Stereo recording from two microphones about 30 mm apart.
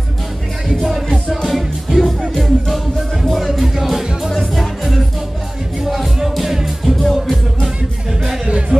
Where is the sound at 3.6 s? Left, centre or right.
Centre.